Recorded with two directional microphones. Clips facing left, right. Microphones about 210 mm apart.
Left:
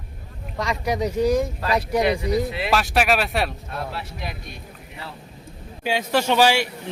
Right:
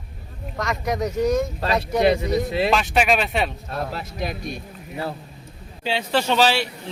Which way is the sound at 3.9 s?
40° right (ahead or behind).